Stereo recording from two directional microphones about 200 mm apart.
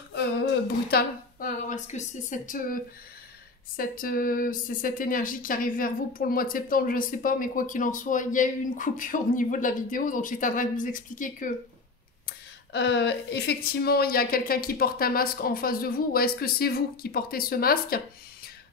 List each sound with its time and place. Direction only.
0.1 s speech: 55° left (ahead or behind)
12.3 s speech: 60° left (ahead or behind)